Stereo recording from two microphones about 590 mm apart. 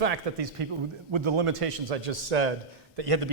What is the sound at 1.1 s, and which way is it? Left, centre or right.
A man's voice, right.